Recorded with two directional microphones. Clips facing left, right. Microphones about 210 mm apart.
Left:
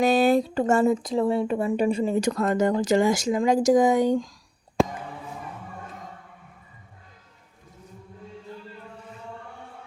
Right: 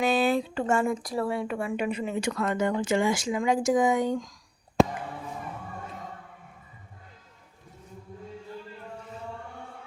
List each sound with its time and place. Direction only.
0.0 s speech: 40° left (ahead or behind)
0.9 s speech: 20° left (ahead or behind)